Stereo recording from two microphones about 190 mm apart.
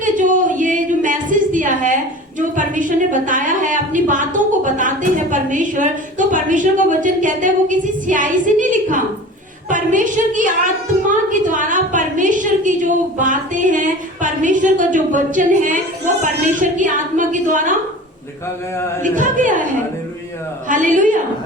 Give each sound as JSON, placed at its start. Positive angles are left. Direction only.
{"t": 0.0, "sound": "a sound", "side_deg": -40}
{"t": 2.4, "sound": "a woman's voice", "side_deg": -40}
{"t": 19.0, "sound": "a woman's voice", "side_deg": -40}
{"t": 20.7, "sound": "a woman's voice", "side_deg": -40}